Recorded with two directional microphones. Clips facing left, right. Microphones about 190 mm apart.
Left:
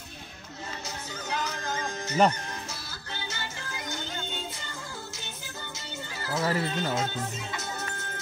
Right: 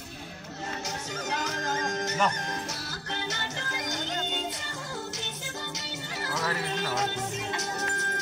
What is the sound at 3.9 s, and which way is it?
Music, 80° right.